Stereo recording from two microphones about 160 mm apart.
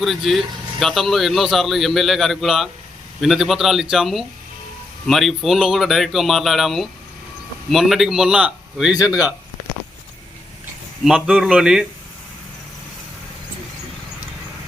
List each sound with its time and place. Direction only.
0.0 s speech: centre (ahead or behind)
11.0 s speech: centre (ahead or behind)